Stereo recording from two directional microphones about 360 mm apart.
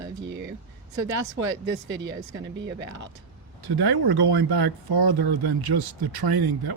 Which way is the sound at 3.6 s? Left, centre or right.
Right.